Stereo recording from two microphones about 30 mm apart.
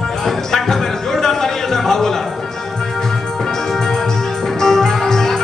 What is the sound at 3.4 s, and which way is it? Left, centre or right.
Music, centre.